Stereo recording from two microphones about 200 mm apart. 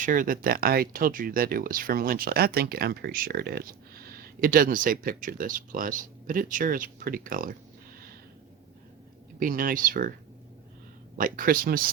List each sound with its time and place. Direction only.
0.0 s speech: 40° right (ahead or behind)
9.4 s speech: 45° right (ahead or behind)
11.2 s speech: 45° right (ahead or behind)